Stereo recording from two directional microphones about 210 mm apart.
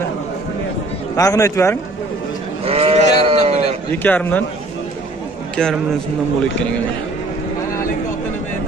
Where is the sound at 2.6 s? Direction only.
30° right (ahead or behind).